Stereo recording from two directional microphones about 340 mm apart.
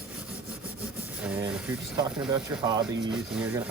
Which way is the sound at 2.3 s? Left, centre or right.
Centre.